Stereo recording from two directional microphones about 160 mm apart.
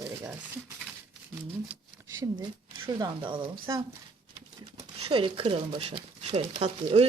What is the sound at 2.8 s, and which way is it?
Speech, 30° right (ahead or behind).